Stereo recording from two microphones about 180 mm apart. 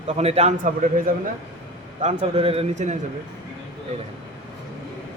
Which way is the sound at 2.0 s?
35° right (ahead or behind).